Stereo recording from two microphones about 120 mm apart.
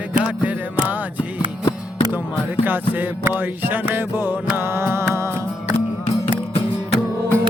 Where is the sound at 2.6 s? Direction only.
15° right (ahead or behind).